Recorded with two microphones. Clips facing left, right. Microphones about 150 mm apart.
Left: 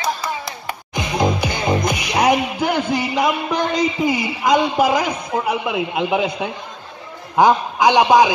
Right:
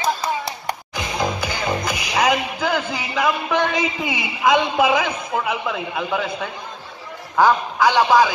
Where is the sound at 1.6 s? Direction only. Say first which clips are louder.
Left 5 dB; 15° left (ahead or behind).